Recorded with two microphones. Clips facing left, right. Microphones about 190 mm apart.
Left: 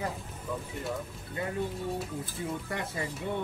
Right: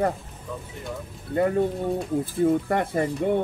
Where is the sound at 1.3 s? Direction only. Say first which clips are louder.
Right 12 dB; 50° right (ahead or behind).